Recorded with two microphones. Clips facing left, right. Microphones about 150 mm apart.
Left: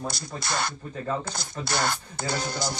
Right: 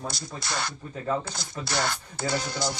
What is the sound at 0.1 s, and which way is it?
Music, 55° left (ahead or behind).